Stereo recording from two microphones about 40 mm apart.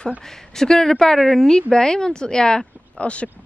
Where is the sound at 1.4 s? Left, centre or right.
Centre.